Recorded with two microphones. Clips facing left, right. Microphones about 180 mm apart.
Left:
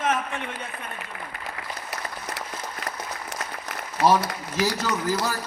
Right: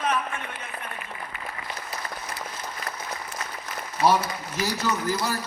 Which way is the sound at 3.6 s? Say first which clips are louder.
Left 1 dB; 80° left.